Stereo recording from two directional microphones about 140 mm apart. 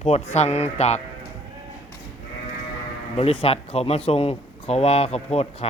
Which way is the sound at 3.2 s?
45° left (ahead or behind).